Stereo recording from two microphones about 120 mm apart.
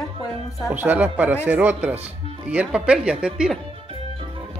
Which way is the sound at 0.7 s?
15° right (ahead or behind).